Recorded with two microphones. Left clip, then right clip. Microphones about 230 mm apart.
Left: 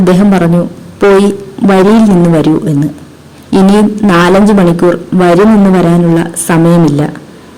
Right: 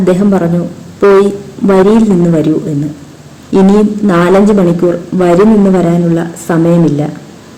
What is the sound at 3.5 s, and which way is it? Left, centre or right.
Speech, left.